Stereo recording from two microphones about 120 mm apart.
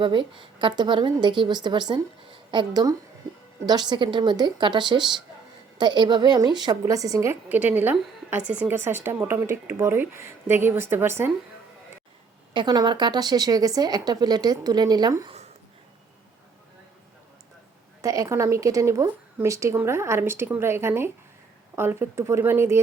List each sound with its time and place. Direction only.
0.0 s a woman's voice: 40° right (ahead or behind); by 11.3 s 20° right (ahead or behind)
12.5 s speech: 35° right (ahead or behind)
18.0 s a woman's voice: 30° right (ahead or behind)